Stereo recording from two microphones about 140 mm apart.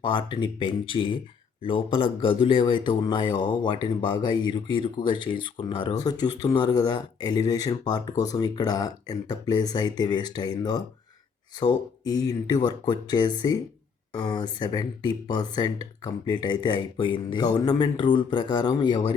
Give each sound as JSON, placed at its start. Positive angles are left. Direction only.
{"t": 0.0, "sound": "speech", "side_deg": 35}